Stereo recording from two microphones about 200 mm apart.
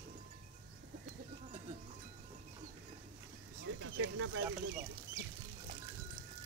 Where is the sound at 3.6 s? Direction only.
85° right.